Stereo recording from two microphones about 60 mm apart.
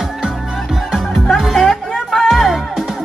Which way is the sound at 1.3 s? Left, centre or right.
Centre.